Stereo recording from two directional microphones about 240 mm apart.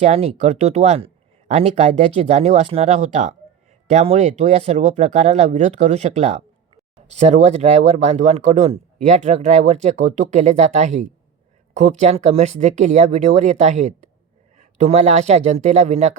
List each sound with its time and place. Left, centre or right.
0.0 s speech: right